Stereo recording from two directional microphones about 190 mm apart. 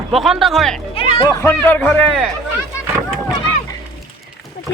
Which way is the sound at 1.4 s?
10° left (ahead or behind).